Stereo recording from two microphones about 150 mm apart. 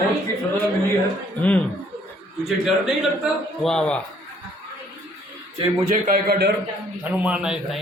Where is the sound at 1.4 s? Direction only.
10° left (ahead or behind).